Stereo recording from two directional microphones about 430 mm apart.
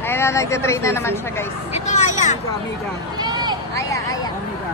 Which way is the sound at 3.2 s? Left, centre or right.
Centre.